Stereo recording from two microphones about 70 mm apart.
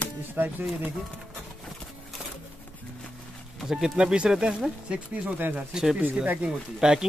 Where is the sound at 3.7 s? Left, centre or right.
Centre.